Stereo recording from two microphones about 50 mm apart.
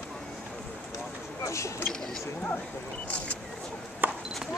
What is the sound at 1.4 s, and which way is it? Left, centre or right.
Speech, left.